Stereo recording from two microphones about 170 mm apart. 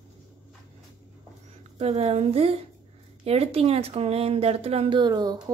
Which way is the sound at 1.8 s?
35° right (ahead or behind).